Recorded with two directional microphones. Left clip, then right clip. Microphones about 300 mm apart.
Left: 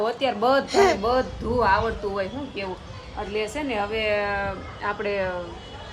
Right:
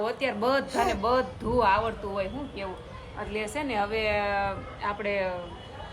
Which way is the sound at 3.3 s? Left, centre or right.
Centre.